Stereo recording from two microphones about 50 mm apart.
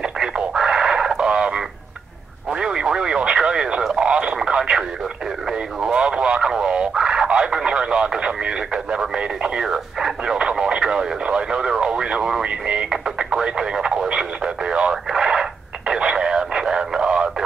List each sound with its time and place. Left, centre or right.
0.6 s radio: centre
2.5 s a sound: centre
3.4 s radio: centre